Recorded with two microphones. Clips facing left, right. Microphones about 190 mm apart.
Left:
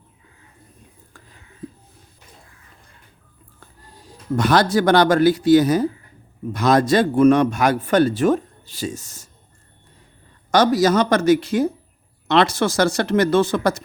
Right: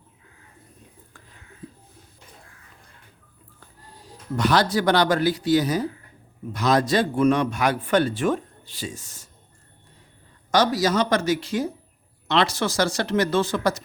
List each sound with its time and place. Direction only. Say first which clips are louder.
4.4 s speech: left 4 dB; 50° left (ahead or behind)
10.5 s speech: left 5 dB; 50° left (ahead or behind)